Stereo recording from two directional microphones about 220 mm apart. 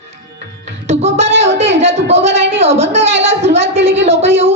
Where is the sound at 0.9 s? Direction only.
30° right (ahead or behind).